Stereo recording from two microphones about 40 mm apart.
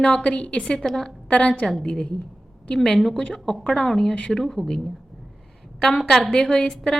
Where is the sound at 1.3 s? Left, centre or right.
Left; by 4.1 s centre.